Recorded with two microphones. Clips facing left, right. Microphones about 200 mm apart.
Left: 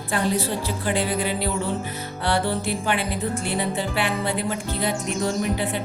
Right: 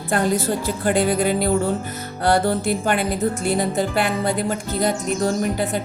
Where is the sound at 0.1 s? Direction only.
45° right (ahead or behind).